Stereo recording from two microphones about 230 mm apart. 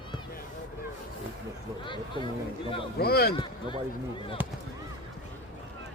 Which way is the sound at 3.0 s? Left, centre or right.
Left.